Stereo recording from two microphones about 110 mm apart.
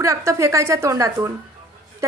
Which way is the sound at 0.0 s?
25° right (ahead or behind).